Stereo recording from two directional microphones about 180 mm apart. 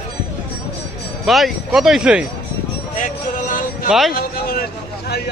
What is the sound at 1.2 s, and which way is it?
Speech, centre (ahead or behind).